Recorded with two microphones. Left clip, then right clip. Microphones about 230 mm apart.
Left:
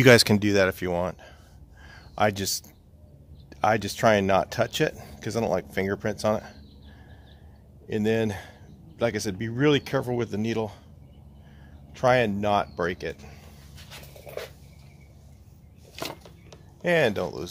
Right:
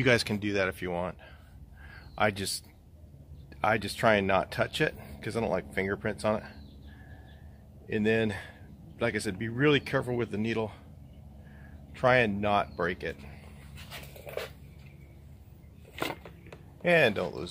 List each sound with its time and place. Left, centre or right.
0.0 s speech: left
1.9 s a sound: left
3.4 s speech: left
7.9 s speech: left
11.9 s speech: left
13.8 s dog: centre
16.8 s speech: left